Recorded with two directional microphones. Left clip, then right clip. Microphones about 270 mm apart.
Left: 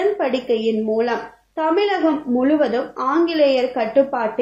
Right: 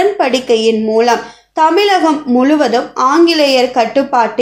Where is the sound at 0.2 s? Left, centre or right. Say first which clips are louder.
Right 8 dB; right.